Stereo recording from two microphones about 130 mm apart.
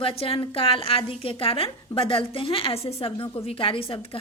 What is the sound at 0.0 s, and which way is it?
A woman's voice, 45° left (ahead or behind).